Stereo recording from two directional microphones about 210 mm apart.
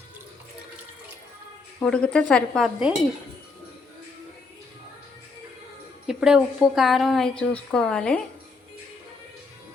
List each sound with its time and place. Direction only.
1.8 s a woman's voice: 5° left (ahead or behind)
6.1 s a woman's voice: 5° right (ahead or behind)